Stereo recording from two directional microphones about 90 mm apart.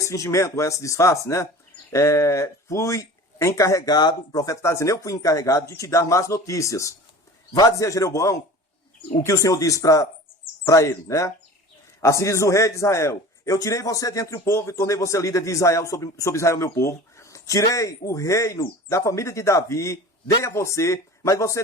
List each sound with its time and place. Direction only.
0.0 s a man's voice: 35° left (ahead or behind)